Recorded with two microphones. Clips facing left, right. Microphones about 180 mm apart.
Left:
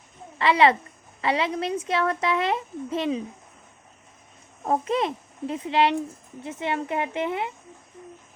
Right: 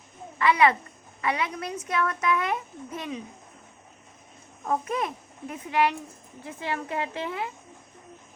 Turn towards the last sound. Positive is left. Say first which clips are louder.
# left 4 dB
turn(degrees=20)  # may be behind; listen again after turning